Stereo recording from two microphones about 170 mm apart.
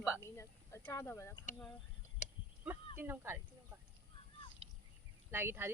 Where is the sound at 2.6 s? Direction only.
10° right (ahead or behind).